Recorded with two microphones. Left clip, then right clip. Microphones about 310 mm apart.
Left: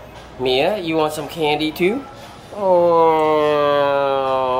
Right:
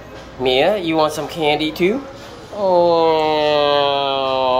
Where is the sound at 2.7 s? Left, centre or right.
Left.